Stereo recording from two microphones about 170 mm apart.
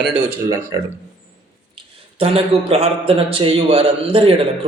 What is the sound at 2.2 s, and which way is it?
A man's voice, 35° right (ahead or behind).